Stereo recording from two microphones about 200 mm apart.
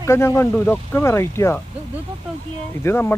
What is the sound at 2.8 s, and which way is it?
Speech, 10° left (ahead or behind).